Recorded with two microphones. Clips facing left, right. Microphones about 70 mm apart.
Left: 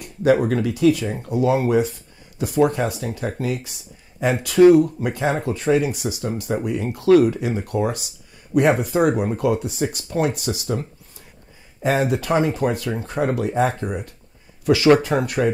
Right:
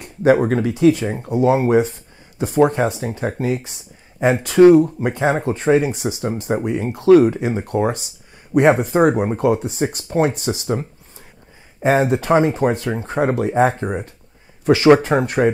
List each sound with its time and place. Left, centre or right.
0.0 s speech: right
11.8 s speech: right